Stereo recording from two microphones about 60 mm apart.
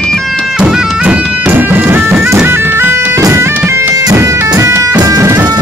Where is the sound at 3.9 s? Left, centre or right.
Right.